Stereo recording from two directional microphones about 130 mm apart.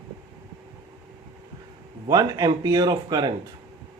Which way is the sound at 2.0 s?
30° right (ahead or behind).